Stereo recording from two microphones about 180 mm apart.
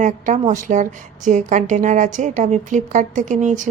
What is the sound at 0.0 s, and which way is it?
A woman's voice, 45° right (ahead or behind).